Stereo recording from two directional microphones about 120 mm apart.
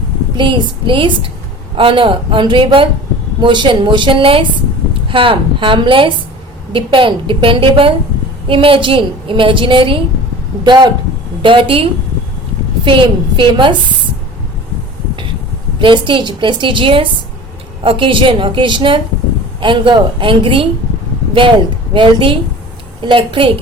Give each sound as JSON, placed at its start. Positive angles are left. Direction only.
{"t": 0.3, "sound": "a woman's voice", "side_deg": -40}
{"t": 15.8, "sound": "a woman's voice", "side_deg": -45}
{"t": 21.9, "sound": "a woman's voice", "side_deg": -45}